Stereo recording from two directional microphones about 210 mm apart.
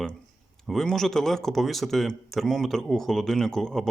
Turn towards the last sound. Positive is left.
turn(degrees=0)  # may be behind; listen again after turning